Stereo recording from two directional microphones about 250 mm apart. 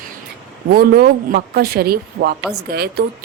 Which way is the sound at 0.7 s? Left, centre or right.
Right.